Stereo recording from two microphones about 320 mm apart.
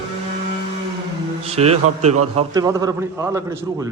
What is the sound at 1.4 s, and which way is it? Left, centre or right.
A man's voice, centre.